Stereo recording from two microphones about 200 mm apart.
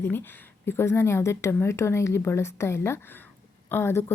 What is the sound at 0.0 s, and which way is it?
A woman's voice, 10° left (ahead or behind).